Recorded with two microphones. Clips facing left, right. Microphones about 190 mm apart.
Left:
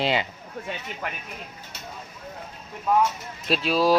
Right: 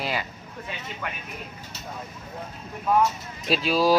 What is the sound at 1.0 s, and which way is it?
Speech, 35° left (ahead or behind).